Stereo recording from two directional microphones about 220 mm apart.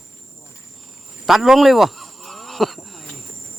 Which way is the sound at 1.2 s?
Centre (ahead or behind).